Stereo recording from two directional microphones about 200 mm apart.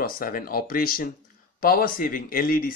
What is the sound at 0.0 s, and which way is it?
Speech, 45° left (ahead or behind).